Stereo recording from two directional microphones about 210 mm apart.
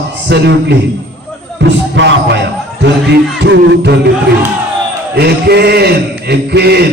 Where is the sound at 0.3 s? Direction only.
55° right (ahead or behind).